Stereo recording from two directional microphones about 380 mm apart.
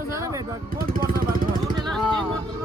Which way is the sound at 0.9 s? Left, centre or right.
Right.